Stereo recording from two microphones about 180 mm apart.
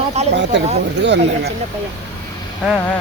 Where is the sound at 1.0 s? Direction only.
75° right (ahead or behind).